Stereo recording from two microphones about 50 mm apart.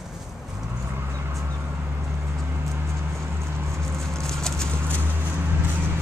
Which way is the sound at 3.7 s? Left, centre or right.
Right.